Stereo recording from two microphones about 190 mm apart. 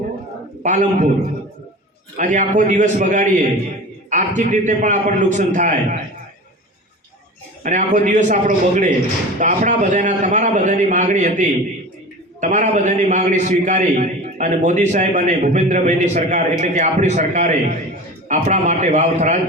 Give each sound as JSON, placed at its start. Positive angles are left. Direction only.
{"t": 0.6, "sound": "a man's voice", "side_deg": -40}
{"t": 2.1, "sound": "a man's voice", "side_deg": -40}
{"t": 7.6, "sound": "a man's voice", "side_deg": -40}